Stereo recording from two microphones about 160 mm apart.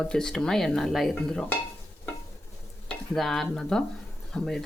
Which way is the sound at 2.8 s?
Centre (ahead or behind).